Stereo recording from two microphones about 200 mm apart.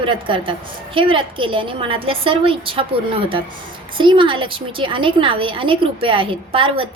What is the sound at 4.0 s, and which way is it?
A woman's voice, 25° right (ahead or behind).